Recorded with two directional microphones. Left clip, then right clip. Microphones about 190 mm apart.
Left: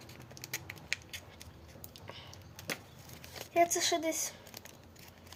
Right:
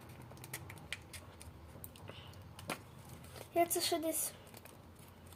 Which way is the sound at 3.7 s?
15° right (ahead or behind).